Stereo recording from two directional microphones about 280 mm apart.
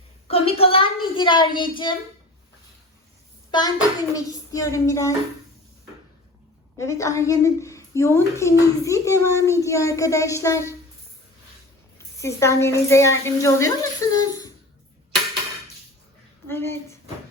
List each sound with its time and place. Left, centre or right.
0.3 s a sound: left
3.5 s a child's voice: centre
6.7 s a woman's voice: centre
11.9 s a woman's voice: centre
16.5 s speech: centre